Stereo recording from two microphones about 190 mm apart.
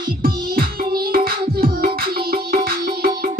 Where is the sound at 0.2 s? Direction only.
50° right (ahead or behind).